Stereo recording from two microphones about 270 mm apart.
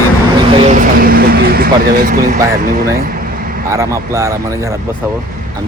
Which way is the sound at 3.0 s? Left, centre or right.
Right.